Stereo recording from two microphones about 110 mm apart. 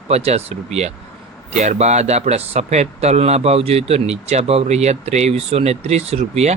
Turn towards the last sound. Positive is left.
turn(degrees=-75)  # may be behind; listen again after turning